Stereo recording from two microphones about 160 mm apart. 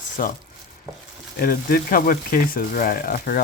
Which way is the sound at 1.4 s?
65° left (ahead or behind).